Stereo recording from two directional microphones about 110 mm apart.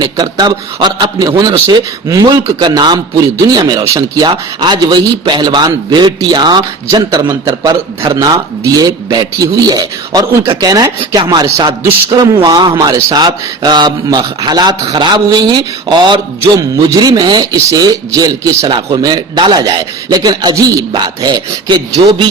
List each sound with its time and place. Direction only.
0.0 s a man's voice: 40° right (ahead or behind)
2.2 s a man's voice: 45° right (ahead or behind)
7.1 s a man's voice: 30° right (ahead or behind)